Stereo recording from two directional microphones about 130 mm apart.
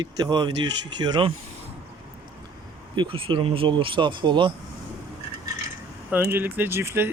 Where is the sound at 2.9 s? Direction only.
40° right (ahead or behind).